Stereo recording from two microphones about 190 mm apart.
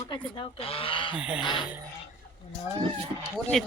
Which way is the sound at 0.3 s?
30° left (ahead or behind).